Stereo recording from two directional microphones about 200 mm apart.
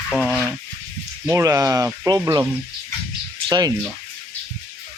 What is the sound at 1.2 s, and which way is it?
Speech, 15° right (ahead or behind).